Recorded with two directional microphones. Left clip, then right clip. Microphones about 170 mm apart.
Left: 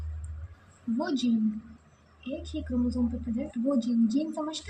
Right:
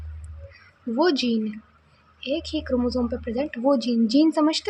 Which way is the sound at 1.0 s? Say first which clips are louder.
Right 8 dB; 50° right (ahead or behind).